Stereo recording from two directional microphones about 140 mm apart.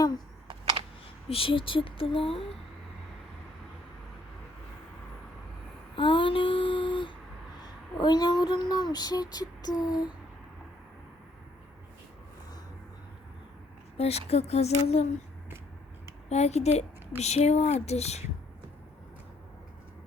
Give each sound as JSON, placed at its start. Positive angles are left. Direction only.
{"t": 1.3, "sound": "speech", "side_deg": 40}
{"t": 6.0, "sound": "a sound", "side_deg": 40}
{"t": 7.9, "sound": "child singing", "side_deg": 30}
{"t": 13.9, "sound": "speech", "side_deg": 45}
{"t": 16.3, "sound": "speech", "side_deg": 50}